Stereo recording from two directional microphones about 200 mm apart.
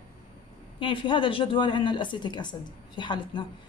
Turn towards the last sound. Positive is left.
turn(degrees=25)  # may be behind; listen again after turning